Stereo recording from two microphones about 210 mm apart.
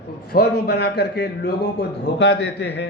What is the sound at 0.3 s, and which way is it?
Speech, 45° left (ahead or behind).